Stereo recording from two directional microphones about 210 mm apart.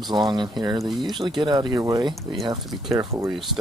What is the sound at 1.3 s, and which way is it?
Speech, 20° right (ahead or behind).